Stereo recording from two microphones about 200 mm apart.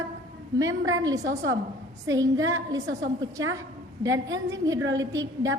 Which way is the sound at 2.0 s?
15° right (ahead or behind).